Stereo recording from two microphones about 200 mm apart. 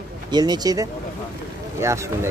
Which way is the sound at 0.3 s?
20° right (ahead or behind).